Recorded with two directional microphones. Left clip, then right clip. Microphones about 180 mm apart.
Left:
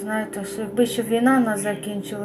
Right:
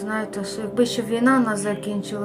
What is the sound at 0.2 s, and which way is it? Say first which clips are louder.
Speech: even; 15° right (ahead or behind).